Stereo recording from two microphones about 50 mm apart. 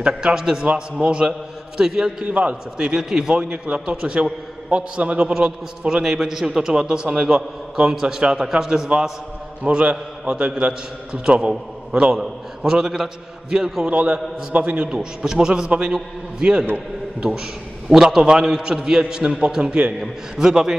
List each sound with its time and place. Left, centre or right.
0.0 s a man's voice: centre
2.3 s a man's voice: right
3.0 s a man's voice: centre
5.2 s a man's voice: centre
9.6 s a man's voice: right; by 13.8 s centre
13.8 s a man's voice: right
20.0 s a man's voice: centre